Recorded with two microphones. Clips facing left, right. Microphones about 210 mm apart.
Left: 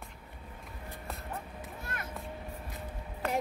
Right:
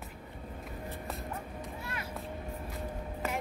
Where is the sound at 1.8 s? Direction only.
50° left (ahead or behind).